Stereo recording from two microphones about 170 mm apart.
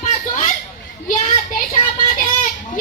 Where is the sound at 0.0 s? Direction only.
40° left (ahead or behind).